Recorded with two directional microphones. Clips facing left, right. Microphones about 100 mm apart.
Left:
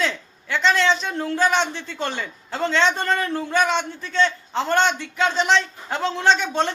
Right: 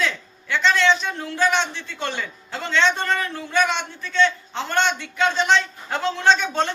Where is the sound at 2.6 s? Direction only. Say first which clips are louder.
Left 1 dB; 35° left (ahead or behind).